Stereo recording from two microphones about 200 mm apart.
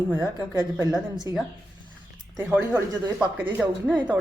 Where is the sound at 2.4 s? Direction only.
10° right (ahead or behind).